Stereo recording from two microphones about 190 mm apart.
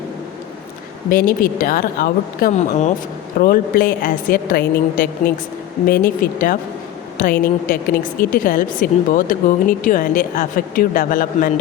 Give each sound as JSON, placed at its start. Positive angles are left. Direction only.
{"t": 1.1, "sound": "a woman's voice", "side_deg": 50}
{"t": 3.3, "sound": "a woman's voice", "side_deg": 50}